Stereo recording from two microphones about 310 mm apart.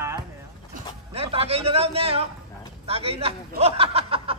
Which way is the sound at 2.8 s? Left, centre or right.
Centre.